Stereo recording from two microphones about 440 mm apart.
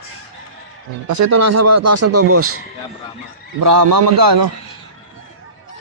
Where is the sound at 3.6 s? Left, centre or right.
Right.